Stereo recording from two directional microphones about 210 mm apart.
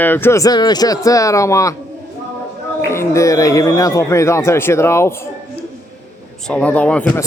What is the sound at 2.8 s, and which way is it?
Speech, 15° left (ahead or behind).